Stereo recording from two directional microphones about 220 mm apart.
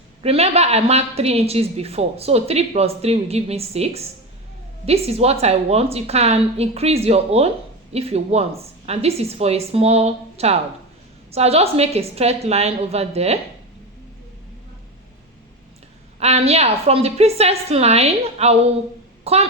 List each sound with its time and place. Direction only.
0.2 s a woman's voice: 25° right (ahead or behind)
16.2 s a woman's voice: 30° right (ahead or behind)